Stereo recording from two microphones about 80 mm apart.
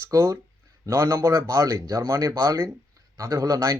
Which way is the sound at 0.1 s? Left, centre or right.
Right.